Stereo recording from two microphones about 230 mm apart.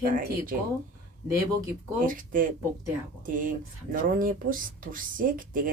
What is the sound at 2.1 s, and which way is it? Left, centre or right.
Speech, right.